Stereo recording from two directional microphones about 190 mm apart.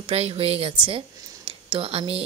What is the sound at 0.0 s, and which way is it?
Speech, 30° right (ahead or behind).